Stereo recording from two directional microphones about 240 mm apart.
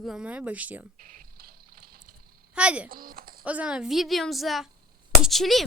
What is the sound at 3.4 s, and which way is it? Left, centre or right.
A woman's voice, centre.